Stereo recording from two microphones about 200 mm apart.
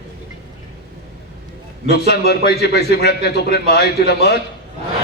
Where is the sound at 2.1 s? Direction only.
55° left (ahead or behind).